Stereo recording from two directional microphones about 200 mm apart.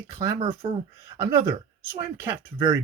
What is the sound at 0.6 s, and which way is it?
Speech, 20° right (ahead or behind).